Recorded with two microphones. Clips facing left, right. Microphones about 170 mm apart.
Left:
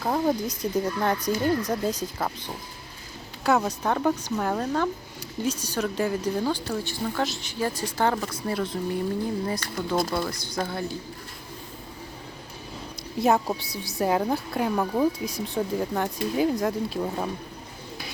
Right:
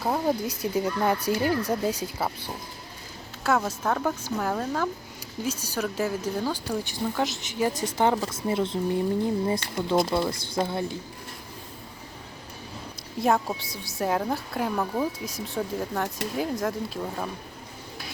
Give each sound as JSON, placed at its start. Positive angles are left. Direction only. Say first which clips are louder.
{"t": 0.0, "sound": "speech", "louder": "left 1 dB", "side_deg": -10}
{"t": 3.4, "sound": "speech", "louder": "left 2 dB", "side_deg": 0}
{"t": 13.2, "sound": "speech", "louder": "left 2 dB", "side_deg": 0}